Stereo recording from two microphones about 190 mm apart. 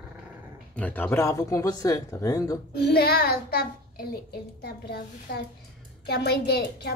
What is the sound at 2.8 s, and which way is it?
A child's voice, 60° left (ahead or behind).